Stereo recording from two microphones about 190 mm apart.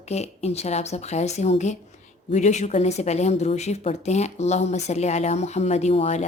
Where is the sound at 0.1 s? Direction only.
35° left (ahead or behind).